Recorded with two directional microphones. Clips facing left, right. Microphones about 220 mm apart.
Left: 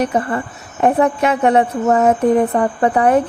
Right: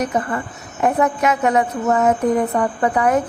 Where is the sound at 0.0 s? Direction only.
30° left (ahead or behind).